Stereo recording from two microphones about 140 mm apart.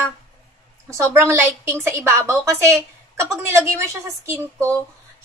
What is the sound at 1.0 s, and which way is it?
A woman's voice, 20° right (ahead or behind).